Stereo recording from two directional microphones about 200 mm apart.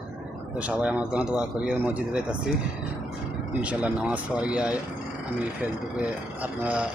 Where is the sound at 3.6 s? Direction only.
5° right (ahead or behind).